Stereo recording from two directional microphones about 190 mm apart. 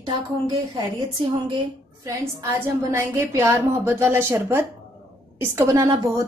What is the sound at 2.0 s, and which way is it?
A woman's voice, 15° right (ahead or behind).